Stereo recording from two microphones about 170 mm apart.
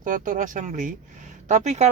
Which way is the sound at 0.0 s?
50° right (ahead or behind).